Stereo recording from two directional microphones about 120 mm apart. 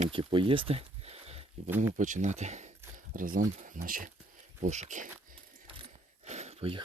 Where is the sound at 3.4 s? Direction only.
90° right.